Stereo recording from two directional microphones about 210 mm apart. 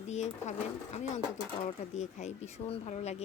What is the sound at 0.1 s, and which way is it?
Speech, 35° left (ahead or behind).